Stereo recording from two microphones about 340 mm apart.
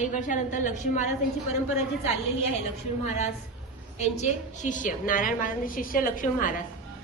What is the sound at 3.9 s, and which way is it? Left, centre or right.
A woman's voice, centre.